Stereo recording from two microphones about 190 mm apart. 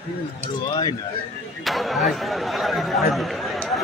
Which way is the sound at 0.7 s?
20° left (ahead or behind).